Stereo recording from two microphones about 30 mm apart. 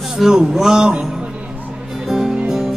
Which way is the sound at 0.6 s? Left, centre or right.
Centre.